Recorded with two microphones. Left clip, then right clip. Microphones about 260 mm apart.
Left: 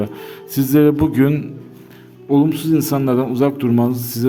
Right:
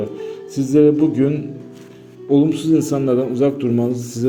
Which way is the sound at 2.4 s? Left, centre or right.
Left.